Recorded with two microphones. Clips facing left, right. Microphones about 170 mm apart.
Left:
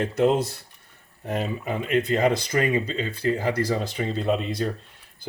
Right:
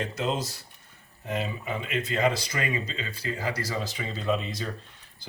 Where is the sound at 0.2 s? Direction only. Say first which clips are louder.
Left 10 dB; 60° left (ahead or behind).